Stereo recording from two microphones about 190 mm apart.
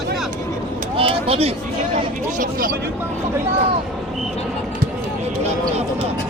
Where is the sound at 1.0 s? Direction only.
30° right (ahead or behind).